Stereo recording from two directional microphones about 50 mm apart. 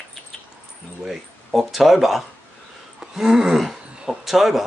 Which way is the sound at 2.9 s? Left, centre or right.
Centre.